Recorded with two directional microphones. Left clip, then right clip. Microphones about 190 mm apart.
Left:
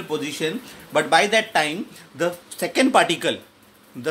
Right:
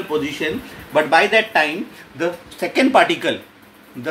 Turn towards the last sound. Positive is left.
turn(degrees=45)  # may be behind; listen again after turning